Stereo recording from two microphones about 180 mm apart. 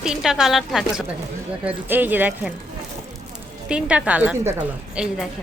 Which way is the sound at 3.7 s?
5° right (ahead or behind).